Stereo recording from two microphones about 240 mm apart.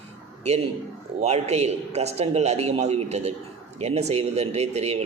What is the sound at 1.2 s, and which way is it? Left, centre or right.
A man's voice, right.